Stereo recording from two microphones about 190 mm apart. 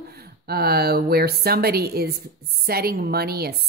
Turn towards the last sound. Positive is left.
turn(degrees=-55)  # may be behind; listen again after turning